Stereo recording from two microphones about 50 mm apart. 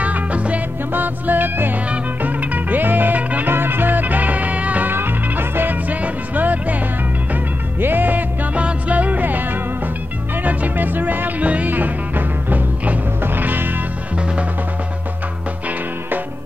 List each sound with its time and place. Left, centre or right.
0.0 s music: right
0.9 s music: right
3.4 s music: right
4.9 s music: right
7.8 s music: right